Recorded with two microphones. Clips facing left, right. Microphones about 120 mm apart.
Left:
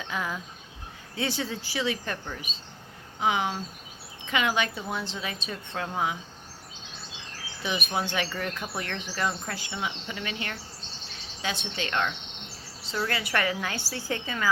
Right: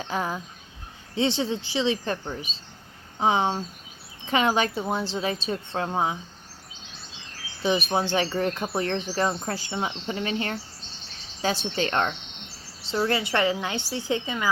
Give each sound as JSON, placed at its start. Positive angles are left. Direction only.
{"t": 0.0, "sound": "a woman's voice", "side_deg": -35}
{"t": 7.6, "sound": "speech", "side_deg": -30}
{"t": 12.9, "sound": "a woman's voice", "side_deg": -25}